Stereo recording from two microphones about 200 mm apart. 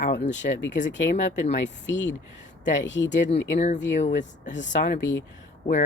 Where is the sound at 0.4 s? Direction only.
45° left (ahead or behind).